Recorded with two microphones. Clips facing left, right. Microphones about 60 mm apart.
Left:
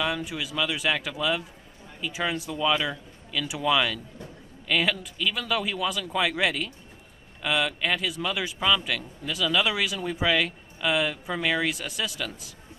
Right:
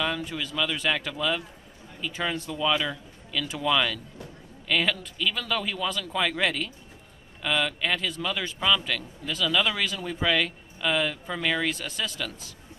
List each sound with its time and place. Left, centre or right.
0.0 s a man's voice: centre